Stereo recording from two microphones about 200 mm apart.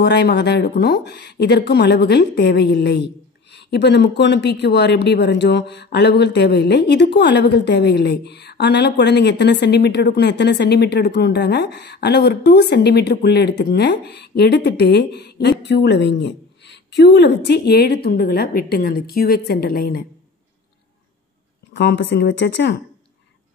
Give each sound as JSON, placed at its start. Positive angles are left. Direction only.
{"t": 0.0, "sound": "speech", "side_deg": 55}
{"t": 21.7, "sound": "speech", "side_deg": 60}